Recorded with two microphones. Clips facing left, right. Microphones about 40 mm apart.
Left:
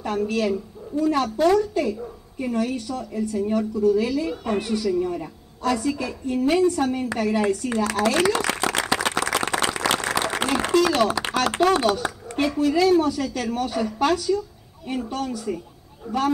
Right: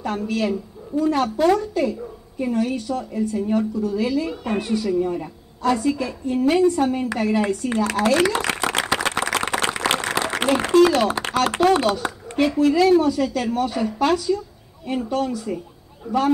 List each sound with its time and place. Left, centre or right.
0.0 s speech: right
1.3 s speech: centre
2.5 s speech: right
8.3 s a sound: right
9.6 s applause: right
11.0 s speech: right
13.0 s speech: right